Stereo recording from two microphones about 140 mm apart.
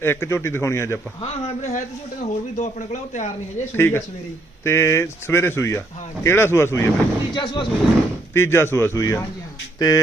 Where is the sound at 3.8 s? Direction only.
15° left (ahead or behind).